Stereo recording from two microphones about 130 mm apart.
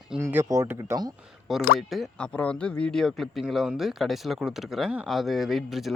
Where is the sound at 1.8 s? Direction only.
Centre (ahead or behind).